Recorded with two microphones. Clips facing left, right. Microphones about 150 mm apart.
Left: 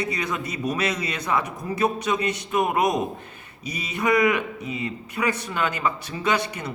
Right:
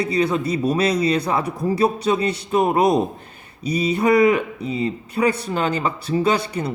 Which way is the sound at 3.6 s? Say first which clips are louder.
Right 8 dB; 35° right (ahead or behind).